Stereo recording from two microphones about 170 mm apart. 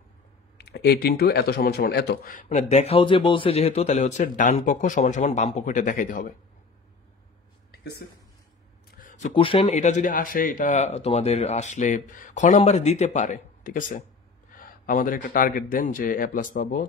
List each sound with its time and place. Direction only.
0.6 s speech: 75° left (ahead or behind); by 6.3 s 50° left (ahead or behind)
8.9 s a sound: 50° left (ahead or behind)
9.3 s speech: 30° left (ahead or behind); by 16.8 s 50° left (ahead or behind)